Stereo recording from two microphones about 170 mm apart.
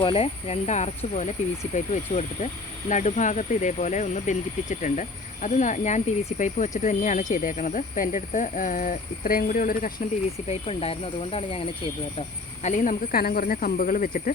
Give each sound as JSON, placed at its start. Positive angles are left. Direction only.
{"t": 0.0, "sound": "speech", "side_deg": 35}
{"t": 10.5, "sound": "speech", "side_deg": 35}
{"t": 12.6, "sound": "speech", "side_deg": 50}